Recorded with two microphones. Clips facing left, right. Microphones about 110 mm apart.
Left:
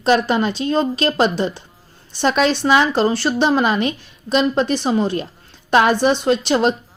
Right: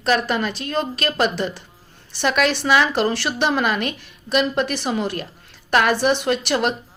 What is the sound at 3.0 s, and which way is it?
Speech, 15° left (ahead or behind).